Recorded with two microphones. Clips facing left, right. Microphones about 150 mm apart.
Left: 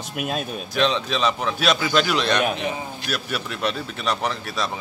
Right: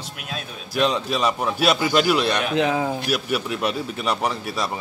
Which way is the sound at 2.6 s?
90° right.